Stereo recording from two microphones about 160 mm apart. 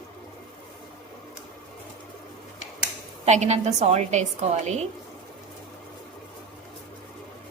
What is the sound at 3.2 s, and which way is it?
A woman's voice, 45° right (ahead or behind).